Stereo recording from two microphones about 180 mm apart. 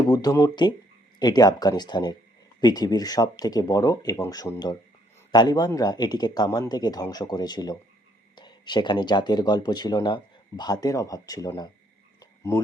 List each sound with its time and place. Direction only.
0.0 s speech: 20° left (ahead or behind)
12.2 s frog: 20° left (ahead or behind)